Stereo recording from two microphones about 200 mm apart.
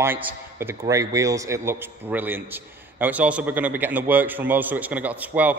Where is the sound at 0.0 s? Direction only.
10° right (ahead or behind).